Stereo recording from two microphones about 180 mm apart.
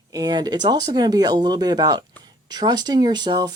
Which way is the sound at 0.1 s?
20° right (ahead or behind).